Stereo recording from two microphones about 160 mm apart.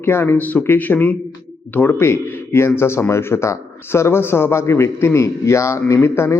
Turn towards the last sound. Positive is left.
turn(degrees=15)  # may be behind; listen again after turning